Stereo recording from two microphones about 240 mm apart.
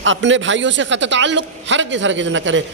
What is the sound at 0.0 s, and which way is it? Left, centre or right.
A man's voice, right.